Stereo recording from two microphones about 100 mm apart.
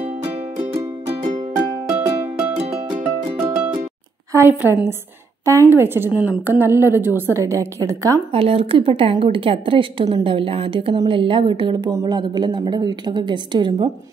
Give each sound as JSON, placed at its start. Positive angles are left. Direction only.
{"t": 1.9, "sound": "music", "side_deg": -15}
{"t": 4.3, "sound": "a woman's voice", "side_deg": -25}
{"t": 8.3, "sound": "a woman's voice", "side_deg": -75}
{"t": 12.1, "sound": "a woman's voice", "side_deg": -45}